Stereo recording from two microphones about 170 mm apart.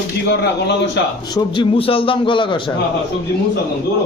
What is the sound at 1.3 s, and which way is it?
Speech, 30° left (ahead or behind).